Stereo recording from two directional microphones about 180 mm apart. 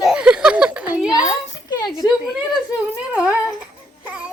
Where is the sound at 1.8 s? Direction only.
25° left (ahead or behind).